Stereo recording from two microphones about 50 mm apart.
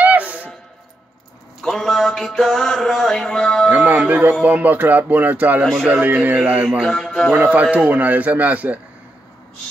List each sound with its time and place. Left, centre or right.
0.0 s a sound: right
1.6 s mantra: centre
3.7 s a man's voice: right
6.9 s mantra: centre
7.3 s speech: right